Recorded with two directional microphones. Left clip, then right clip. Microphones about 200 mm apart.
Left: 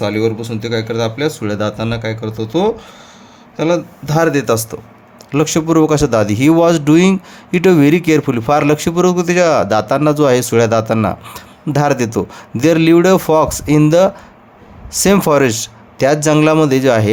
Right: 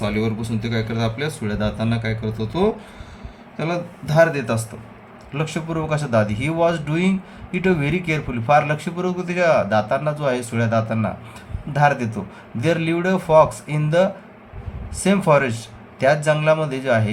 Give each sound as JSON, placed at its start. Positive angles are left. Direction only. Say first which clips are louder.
{"t": 0.0, "sound": "speech", "louder": "left 8 dB", "side_deg": 55}